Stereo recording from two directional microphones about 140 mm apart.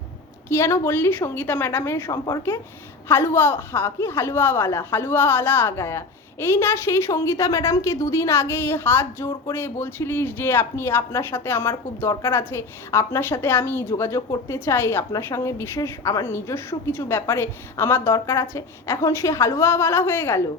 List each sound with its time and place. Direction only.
0.4 s a woman's voice: 20° left (ahead or behind)